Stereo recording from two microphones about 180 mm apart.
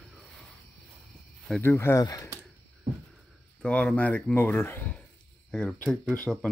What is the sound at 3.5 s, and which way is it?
Speech, 5° left (ahead or behind).